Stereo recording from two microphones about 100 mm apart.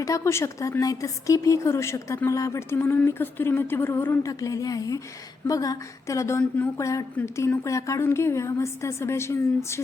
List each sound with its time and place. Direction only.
0.0 s a woman's voice: 30° left (ahead or behind)
4.3 s a woman's voice: 35° left (ahead or behind)